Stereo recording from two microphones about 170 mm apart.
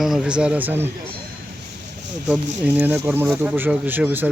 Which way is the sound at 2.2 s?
5° right (ahead or behind).